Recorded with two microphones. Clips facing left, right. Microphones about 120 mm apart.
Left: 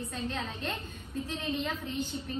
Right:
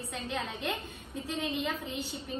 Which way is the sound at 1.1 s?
65° right (ahead or behind).